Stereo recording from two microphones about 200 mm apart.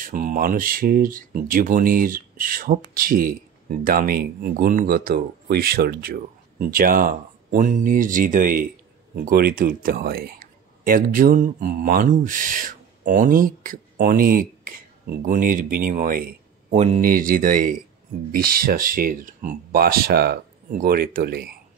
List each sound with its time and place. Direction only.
0.0 s speech: 40° right (ahead or behind)